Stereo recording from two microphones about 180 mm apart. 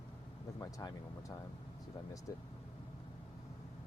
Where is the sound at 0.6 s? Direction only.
20° left (ahead or behind).